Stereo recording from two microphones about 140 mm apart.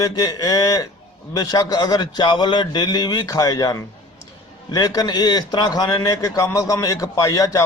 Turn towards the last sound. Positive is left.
turn(degrees=25)  # may be behind; listen again after turning